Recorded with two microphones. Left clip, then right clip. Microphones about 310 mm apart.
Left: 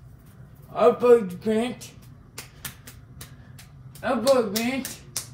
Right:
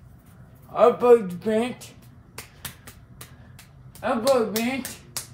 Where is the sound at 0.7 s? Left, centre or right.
Right.